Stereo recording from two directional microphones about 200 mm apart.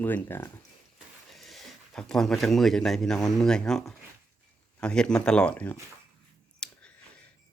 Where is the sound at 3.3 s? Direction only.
5° left (ahead or behind).